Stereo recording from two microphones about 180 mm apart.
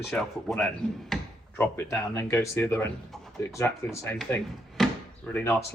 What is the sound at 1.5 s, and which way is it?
Speech, 15° left (ahead or behind).